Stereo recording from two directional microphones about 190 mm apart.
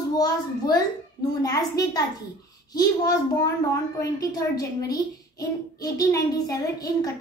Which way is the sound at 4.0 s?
15° left (ahead or behind).